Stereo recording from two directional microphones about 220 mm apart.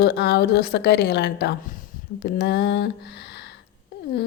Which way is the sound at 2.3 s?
45° left (ahead or behind).